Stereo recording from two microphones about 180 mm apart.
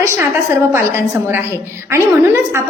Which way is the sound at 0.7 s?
15° right (ahead or behind).